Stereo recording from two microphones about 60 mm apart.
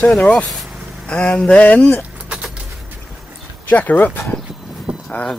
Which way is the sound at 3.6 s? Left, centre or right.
Left.